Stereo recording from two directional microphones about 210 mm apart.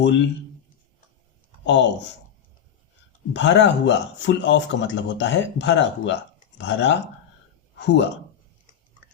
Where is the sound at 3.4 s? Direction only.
60° left (ahead or behind).